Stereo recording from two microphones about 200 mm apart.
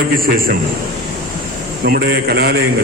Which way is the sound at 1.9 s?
50° right (ahead or behind).